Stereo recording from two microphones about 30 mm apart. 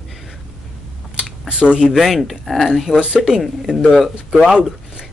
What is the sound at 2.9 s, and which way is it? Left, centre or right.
Speech, right.